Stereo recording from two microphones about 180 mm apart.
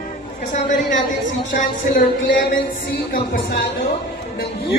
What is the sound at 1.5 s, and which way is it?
Speech, 50° left (ahead or behind).